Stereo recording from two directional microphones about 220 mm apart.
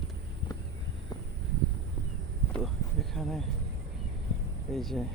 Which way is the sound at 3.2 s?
Centre (ahead or behind).